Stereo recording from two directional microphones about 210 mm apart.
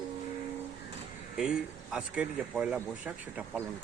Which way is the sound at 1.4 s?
5° right (ahead or behind).